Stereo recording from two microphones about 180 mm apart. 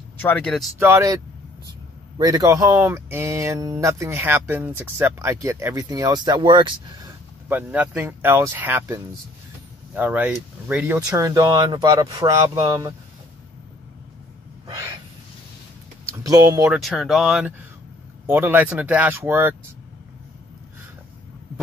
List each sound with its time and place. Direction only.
0.2 s speech: 10° left (ahead or behind)
0.7 s speech: 15° right (ahead or behind)
7.4 s speech: 10° right (ahead or behind)
14.7 s a sound: 20° right (ahead or behind)
16.1 s speech: 20° right (ahead or behind)
16.7 s speech: centre (ahead or behind)